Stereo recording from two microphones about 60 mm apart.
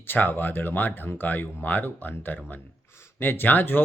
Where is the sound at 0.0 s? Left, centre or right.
Left.